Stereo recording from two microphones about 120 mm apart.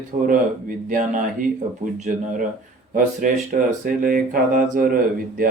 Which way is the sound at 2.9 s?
90° right.